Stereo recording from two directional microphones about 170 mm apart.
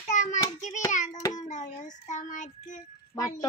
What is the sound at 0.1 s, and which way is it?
Child singing, 45° left (ahead or behind).